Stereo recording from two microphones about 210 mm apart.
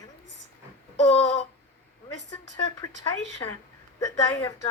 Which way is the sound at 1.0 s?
30° left (ahead or behind).